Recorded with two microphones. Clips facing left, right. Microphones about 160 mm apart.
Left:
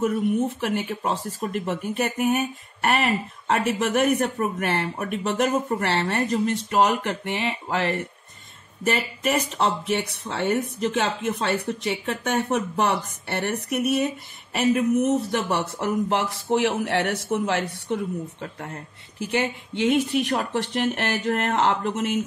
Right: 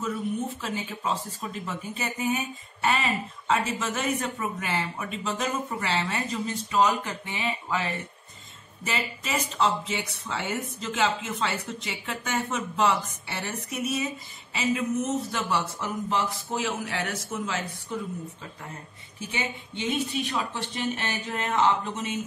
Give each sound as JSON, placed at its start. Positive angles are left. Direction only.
{"t": 0.6, "sound": "speech", "side_deg": 65}